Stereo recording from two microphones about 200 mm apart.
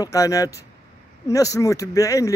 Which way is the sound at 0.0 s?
15° left (ahead or behind).